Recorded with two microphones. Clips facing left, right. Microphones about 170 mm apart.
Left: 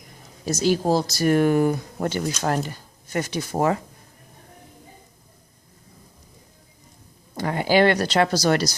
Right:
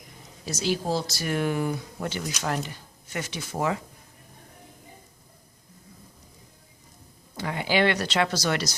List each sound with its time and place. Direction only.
0.4 s speech: 45° left (ahead or behind)
7.3 s a woman's voice: 45° left (ahead or behind)